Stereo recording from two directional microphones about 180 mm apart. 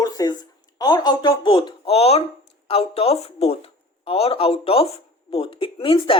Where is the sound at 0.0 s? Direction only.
20° left (ahead or behind).